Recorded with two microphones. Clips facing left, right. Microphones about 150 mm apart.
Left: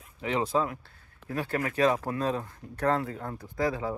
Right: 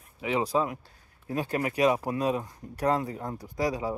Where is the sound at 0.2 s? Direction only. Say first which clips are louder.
Right 1 dB; 10° right (ahead or behind).